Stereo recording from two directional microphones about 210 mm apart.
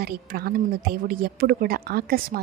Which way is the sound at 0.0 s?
45° right (ahead or behind).